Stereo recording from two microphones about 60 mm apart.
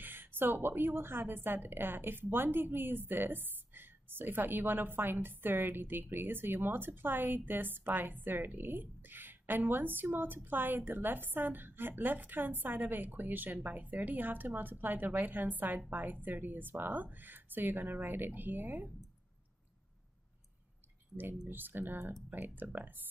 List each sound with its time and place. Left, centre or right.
0.0 s a woman's voice: right
21.2 s a woman's voice: right